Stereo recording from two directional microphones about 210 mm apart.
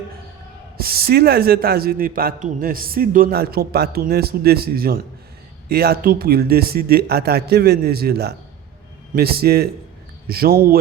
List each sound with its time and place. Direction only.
0.8 s a man's voice: 45° right (ahead or behind)